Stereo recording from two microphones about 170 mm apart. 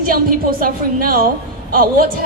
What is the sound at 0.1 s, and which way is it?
A woman's voice, 55° right (ahead or behind).